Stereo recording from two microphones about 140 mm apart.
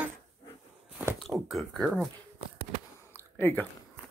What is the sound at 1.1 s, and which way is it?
Speech, centre (ahead or behind).